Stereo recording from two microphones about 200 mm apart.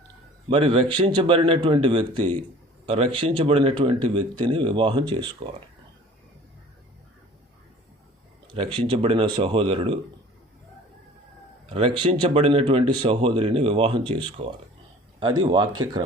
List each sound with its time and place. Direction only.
0.4 s speech: 25° right (ahead or behind)
8.5 s speech: 25° right (ahead or behind)
11.7 s speech: 25° right (ahead or behind)